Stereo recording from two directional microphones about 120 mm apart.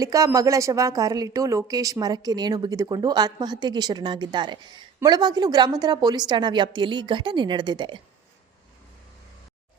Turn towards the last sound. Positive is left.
turn(degrees=-40)  # may be behind; listen again after turning